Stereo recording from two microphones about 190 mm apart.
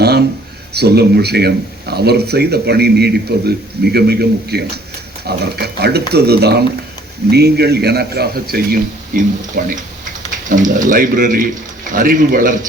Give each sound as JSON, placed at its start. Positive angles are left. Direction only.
{"t": 0.7, "sound": "speech", "side_deg": -60}